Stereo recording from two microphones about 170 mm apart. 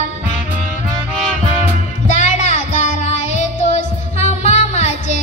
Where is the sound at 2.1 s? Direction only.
45° left (ahead or behind).